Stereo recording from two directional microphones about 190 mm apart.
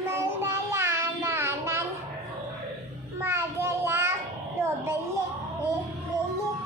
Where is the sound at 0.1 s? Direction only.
15° right (ahead or behind).